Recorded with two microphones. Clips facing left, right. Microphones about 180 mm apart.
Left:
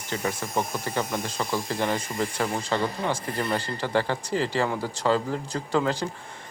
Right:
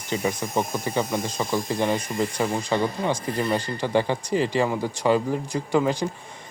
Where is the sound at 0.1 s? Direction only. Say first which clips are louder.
Right 3 dB; 15° right (ahead or behind).